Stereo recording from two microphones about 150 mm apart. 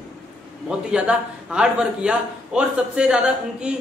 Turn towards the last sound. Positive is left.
turn(degrees=-5)  # may be behind; listen again after turning